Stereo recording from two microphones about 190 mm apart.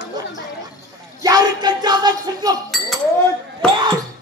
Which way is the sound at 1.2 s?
20° right (ahead or behind).